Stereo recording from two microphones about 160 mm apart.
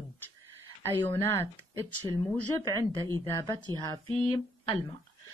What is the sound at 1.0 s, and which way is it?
Speech, 15° left (ahead or behind).